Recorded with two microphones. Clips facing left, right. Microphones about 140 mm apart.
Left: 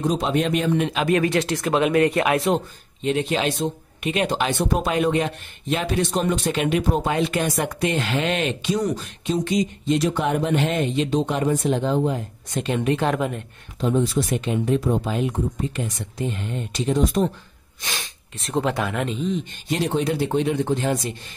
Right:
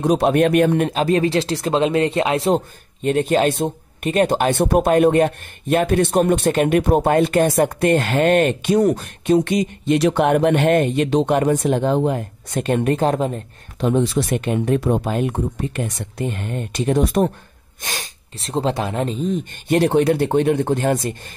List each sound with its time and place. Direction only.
0.0 s speech: 60° right (ahead or behind); by 2.6 s 30° right (ahead or behind)
3.0 s speech: 50° right (ahead or behind)
13.1 s speech: 30° right (ahead or behind)
13.7 s speech: 65° right (ahead or behind)
15.0 s speech: 55° right (ahead or behind)
17.8 s speech: 40° right (ahead or behind)